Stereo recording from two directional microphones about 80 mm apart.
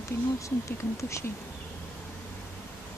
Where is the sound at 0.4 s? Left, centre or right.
Left.